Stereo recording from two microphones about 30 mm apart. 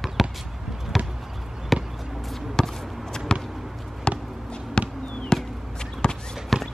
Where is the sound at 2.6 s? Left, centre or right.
Centre.